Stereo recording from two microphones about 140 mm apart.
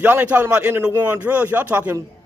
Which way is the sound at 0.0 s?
15° right (ahead or behind).